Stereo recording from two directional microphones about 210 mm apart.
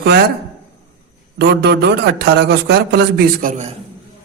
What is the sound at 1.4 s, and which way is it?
A man's voice, 50° right (ahead or behind).